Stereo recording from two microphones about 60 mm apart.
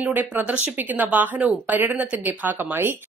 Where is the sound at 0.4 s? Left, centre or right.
Right.